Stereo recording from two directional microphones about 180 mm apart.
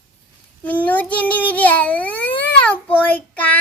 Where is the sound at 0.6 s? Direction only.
10° left (ahead or behind).